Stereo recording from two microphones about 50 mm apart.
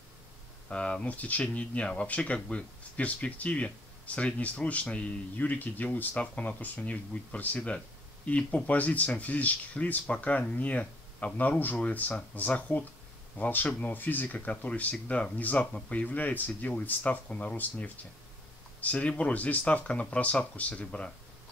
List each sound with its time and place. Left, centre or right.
0.7 s speech: centre